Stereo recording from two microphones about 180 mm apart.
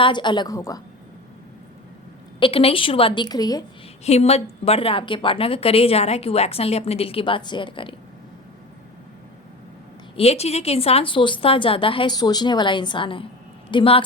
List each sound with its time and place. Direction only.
0.0 s a woman's voice: 25° left (ahead or behind)
2.4 s a woman's voice: 30° left (ahead or behind)
4.0 s a woman's voice: 35° left (ahead or behind)
10.2 s a woman's voice: 35° left (ahead or behind)